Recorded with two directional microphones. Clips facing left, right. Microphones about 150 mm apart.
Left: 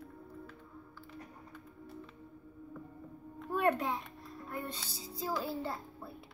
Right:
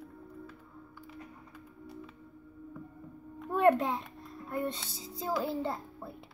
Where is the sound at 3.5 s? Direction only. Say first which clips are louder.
Right 6 dB; 25° right (ahead or behind).